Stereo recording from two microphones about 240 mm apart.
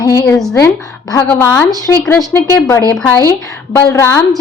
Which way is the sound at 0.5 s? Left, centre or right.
Centre.